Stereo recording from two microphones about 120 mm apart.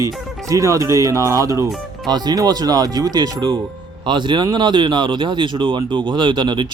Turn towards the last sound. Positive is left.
turn(degrees=-40)  # may be behind; listen again after turning